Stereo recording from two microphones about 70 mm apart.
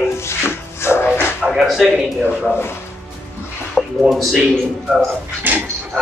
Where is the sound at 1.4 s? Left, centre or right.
Centre.